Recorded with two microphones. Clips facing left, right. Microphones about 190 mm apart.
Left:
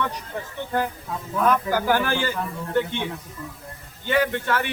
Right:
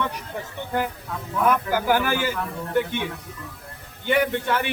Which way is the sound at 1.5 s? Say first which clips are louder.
Even; 10° right (ahead or behind).